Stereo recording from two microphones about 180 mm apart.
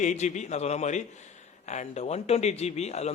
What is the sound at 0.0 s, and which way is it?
A man's voice, 40° left (ahead or behind).